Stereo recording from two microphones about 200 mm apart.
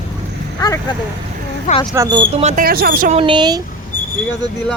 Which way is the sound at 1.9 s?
20° right (ahead or behind).